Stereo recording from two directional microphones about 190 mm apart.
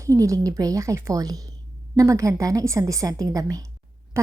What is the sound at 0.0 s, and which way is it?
A woman's voice, 15° right (ahead or behind).